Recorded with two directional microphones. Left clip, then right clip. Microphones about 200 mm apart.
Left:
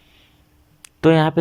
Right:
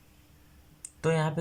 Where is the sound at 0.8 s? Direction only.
45° left (ahead or behind).